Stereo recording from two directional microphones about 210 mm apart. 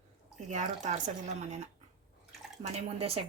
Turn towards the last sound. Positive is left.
turn(degrees=-30)  # may be behind; listen again after turning